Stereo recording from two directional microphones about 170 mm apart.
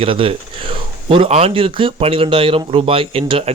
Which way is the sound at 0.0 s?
35° right (ahead or behind).